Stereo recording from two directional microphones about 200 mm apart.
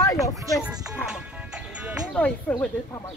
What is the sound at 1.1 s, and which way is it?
Music, 5° right (ahead or behind).